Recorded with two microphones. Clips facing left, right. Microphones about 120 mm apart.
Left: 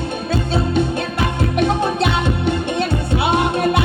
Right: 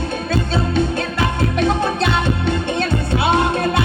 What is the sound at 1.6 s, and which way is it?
Music, 15° left (ahead or behind).